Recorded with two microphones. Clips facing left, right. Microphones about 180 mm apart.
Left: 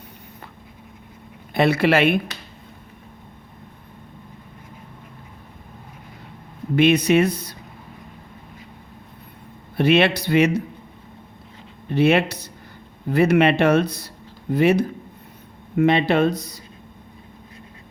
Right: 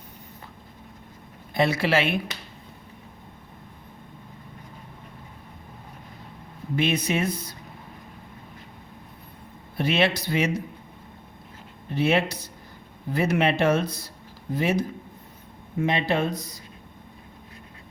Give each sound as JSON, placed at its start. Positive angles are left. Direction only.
{"t": 1.5, "sound": "a man's voice", "side_deg": 60}
{"t": 6.7, "sound": "a man's voice", "side_deg": 70}
{"t": 9.7, "sound": "a man's voice", "side_deg": 65}
{"t": 11.9, "sound": "a man's voice", "side_deg": 65}